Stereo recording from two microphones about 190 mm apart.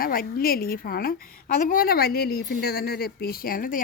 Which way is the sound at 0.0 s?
50° left (ahead or behind).